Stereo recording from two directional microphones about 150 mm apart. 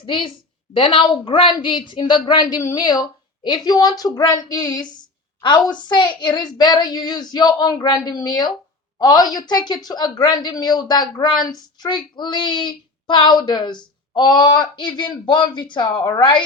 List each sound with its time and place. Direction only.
0.0 s a woman's voice: 35° left (ahead or behind)